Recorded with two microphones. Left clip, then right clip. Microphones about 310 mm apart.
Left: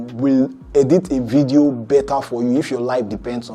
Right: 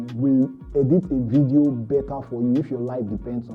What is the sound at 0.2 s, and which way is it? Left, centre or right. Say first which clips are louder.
Speech: left 4 dB; centre.